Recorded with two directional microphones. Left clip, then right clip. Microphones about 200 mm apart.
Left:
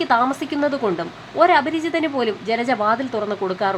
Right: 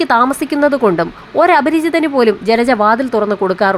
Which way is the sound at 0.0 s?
25° right (ahead or behind).